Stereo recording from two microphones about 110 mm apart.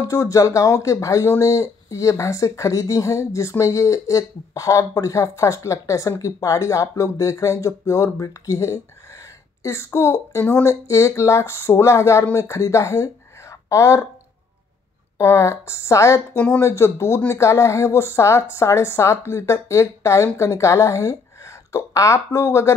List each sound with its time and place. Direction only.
0.0 s speech: 30° left (ahead or behind)
15.1 s speech: 30° left (ahead or behind)